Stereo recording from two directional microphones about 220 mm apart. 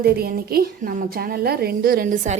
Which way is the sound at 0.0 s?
45° right (ahead or behind).